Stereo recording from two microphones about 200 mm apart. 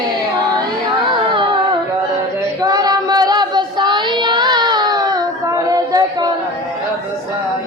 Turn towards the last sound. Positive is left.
turn(degrees=-20)  # may be behind; listen again after turning